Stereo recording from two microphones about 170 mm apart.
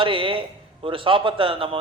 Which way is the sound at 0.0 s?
30° right (ahead or behind).